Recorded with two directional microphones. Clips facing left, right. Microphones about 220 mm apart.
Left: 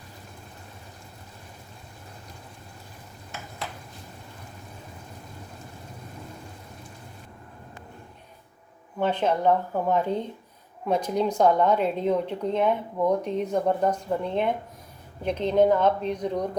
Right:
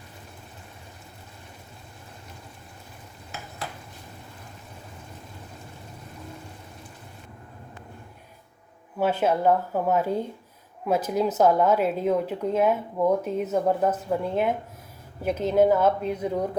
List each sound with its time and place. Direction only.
9.0 s speech: 5° right (ahead or behind)